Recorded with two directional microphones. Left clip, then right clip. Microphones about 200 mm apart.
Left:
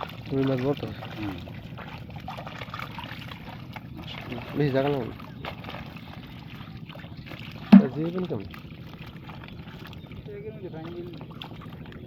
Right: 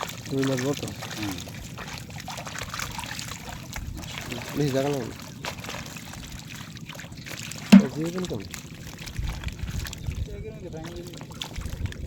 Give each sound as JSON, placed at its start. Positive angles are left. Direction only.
{"t": 0.0, "sound": "speech", "side_deg": -20}
{"t": 2.7, "sound": "water", "side_deg": -25}
{"t": 4.1, "sound": "boat", "side_deg": -15}
{"t": 7.7, "sound": "a sound", "side_deg": -35}
{"t": 8.0, "sound": "speech", "side_deg": -15}